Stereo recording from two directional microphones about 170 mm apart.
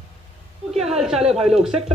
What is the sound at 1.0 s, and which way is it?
Speech, centre (ahead or behind).